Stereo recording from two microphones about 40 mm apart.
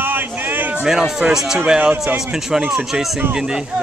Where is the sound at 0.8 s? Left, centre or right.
Centre.